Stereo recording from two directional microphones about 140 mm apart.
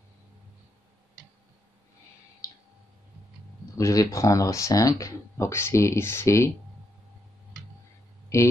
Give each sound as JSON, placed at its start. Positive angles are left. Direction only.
{"t": 3.7, "sound": "speech", "side_deg": 25}